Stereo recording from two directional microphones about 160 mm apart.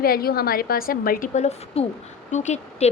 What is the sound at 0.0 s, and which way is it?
A woman's voice, 70° left (ahead or behind).